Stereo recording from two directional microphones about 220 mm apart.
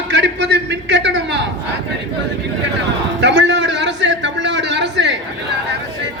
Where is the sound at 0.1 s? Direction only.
55° right (ahead or behind).